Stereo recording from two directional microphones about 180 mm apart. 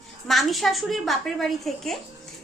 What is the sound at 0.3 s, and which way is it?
A woman's voice, centre (ahead or behind).